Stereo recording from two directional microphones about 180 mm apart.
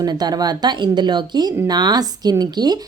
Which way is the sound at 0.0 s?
20° right (ahead or behind).